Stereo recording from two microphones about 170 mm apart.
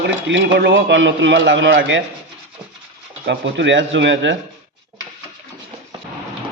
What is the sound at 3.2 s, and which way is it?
A man's voice, 90° right.